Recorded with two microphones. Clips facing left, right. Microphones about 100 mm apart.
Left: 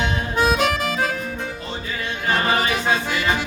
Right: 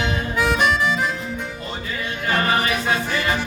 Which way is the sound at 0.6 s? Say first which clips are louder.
Right 1 dB; 85° left.